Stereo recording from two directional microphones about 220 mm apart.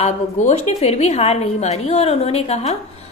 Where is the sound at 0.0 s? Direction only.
30° left (ahead or behind).